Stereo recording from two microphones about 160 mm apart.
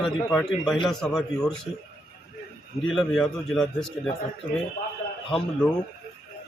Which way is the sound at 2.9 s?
Centre (ahead or behind).